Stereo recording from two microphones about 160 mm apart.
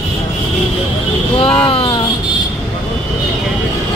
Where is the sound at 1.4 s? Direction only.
35° left (ahead or behind).